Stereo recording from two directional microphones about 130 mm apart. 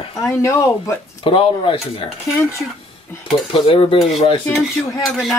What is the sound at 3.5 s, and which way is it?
Speech, 45° left (ahead or behind).